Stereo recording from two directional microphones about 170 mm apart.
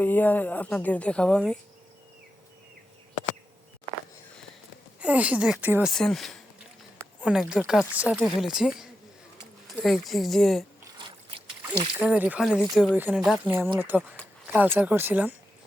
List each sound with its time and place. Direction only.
0.0 s a woman's voice: 10° left (ahead or behind)
4.9 s speech: 10° right (ahead or behind)
5.9 s speech: centre (ahead or behind)
10.9 s boat: 30° right (ahead or behind)
12.0 s speech: 10° right (ahead or behind)
13.7 s speech: 10° right (ahead or behind)